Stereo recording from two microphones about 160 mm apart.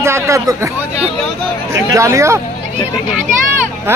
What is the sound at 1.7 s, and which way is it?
Speech, 20° right (ahead or behind).